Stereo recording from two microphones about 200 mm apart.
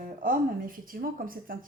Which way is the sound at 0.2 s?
45° right (ahead or behind).